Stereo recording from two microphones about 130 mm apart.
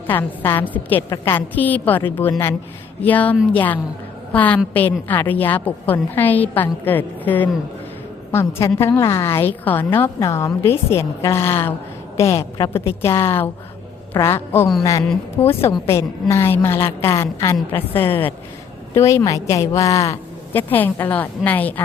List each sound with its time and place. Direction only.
0.1 s a woman's voice: 15° left (ahead or behind)